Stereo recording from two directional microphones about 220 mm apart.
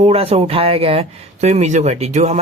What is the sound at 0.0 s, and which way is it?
Speech, 30° right (ahead or behind).